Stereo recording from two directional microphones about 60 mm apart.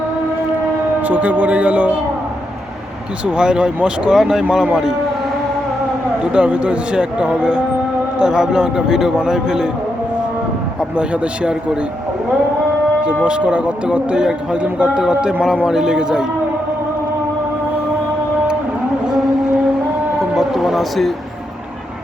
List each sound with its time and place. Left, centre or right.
1.0 s speech: right
3.2 s speech: centre
6.3 s speech: centre
10.8 s a man's voice: centre
13.2 s speech: centre
20.3 s a sound: centre